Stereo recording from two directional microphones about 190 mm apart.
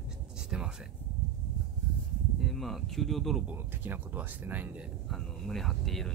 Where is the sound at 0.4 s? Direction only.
5° right (ahead or behind).